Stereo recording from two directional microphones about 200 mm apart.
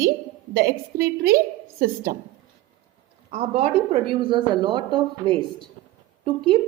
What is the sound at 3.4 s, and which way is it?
A woman's voice, 30° right (ahead or behind).